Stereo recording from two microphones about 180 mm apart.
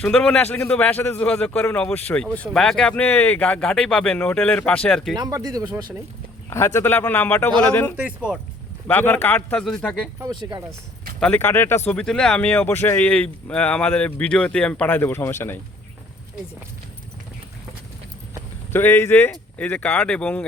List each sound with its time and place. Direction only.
0.0 s a man's voice: 5° left (ahead or behind)
5.1 s speech: 20° right (ahead or behind)
6.5 s a man's voice: 15° left (ahead or behind)
7.9 s speech: 5° right (ahead or behind)
8.9 s a man's voice: 10° left (ahead or behind)
11.2 s a man's voice: 10° left (ahead or behind)
18.7 s a man's voice: 10° left (ahead or behind)